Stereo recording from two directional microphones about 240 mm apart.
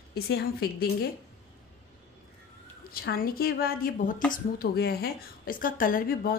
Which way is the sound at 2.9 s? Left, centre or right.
Left.